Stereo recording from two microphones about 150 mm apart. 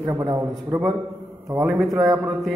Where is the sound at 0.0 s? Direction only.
20° right (ahead or behind).